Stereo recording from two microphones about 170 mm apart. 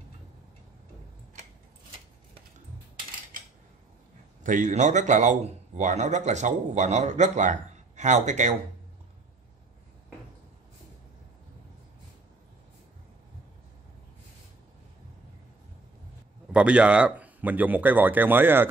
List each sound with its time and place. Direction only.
4.4 s a man's voice: 50° right (ahead or behind)
16.5 s speech: 5° right (ahead or behind)